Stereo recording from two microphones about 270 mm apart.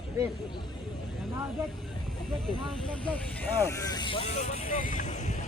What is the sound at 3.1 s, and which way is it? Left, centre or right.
Speech, centre.